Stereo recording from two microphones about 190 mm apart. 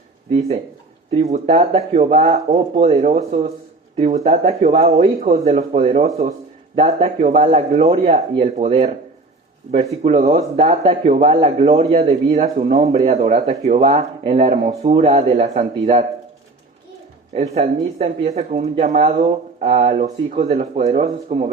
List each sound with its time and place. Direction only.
0.3 s speech: 30° right (ahead or behind)
10.0 s speech: 35° right (ahead or behind)
17.3 s speech: 35° right (ahead or behind)